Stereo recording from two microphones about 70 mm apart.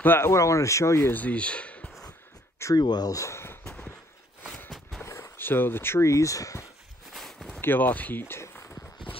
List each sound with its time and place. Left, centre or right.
0.0 s speech: left
0.3 s speech: left
1.1 s speech: left
2.7 s speech: left
3.2 s speech: left
3.6 s a sound: centre
4.6 s walk: centre
5.0 s a sound: left
5.4 s speech: left
7.2 s a sound: centre
7.6 s speech: left